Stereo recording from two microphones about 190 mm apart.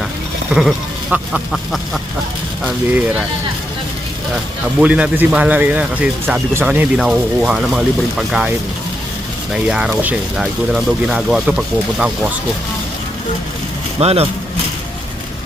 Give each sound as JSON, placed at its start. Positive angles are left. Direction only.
{"t": 0.5, "sound": "speech", "side_deg": -5}
{"t": 4.8, "sound": "speech", "side_deg": -5}
{"t": 9.6, "sound": "speech", "side_deg": -5}
{"t": 14.0, "sound": "speech", "side_deg": -35}